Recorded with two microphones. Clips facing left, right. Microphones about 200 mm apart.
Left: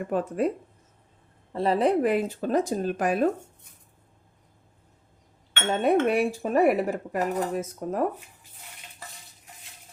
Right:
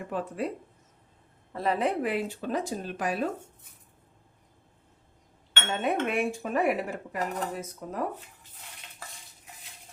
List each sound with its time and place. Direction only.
0.1 s speech: 45° left (ahead or behind)
1.5 s speech: 30° left (ahead or behind); by 3.2 s 50° left (ahead or behind)
5.8 s speech: 40° left (ahead or behind)